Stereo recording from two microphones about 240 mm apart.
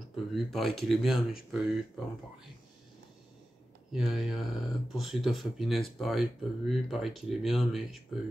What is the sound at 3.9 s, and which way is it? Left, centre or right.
Speech, centre.